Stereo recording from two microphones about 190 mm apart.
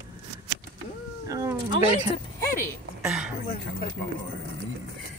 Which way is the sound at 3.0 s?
5° right (ahead or behind).